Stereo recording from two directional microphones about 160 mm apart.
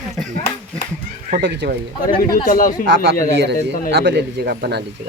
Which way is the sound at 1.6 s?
90° right.